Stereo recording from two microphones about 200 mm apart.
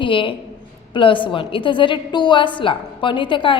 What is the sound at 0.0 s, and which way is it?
A woman's voice, 25° left (ahead or behind).